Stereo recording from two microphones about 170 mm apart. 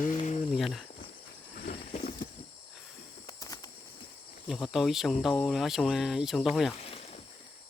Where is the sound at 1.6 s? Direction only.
50° left (ahead or behind).